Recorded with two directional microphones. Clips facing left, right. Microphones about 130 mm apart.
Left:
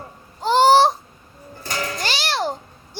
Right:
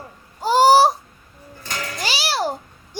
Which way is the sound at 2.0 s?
5° right (ahead or behind).